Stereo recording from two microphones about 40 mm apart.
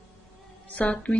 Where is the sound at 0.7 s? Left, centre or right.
Left.